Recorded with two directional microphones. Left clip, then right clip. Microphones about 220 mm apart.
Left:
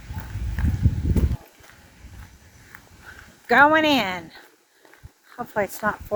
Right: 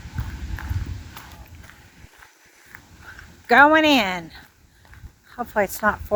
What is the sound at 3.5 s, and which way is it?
A woman's voice, 10° right (ahead or behind).